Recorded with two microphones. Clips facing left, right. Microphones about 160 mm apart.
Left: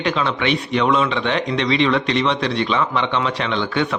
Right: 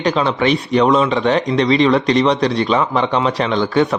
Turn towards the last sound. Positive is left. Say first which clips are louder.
# right 5 dB
turn(degrees=-40)  # may be behind; listen again after turning